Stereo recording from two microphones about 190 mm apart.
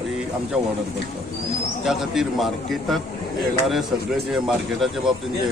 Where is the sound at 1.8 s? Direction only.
Centre (ahead or behind).